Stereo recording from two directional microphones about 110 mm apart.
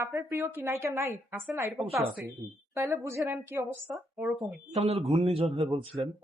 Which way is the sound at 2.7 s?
25° right (ahead or behind).